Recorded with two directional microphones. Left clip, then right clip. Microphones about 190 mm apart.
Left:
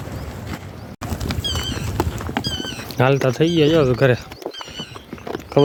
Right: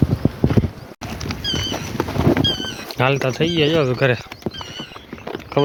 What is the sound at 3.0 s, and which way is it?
Speech, 40° left (ahead or behind).